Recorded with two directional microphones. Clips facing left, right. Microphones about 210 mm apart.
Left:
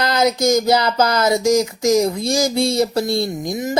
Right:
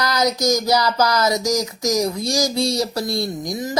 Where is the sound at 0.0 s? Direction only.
25° left (ahead or behind).